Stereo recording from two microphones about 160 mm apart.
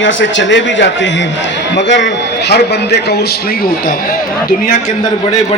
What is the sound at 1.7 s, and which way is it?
A man's voice, 90° left.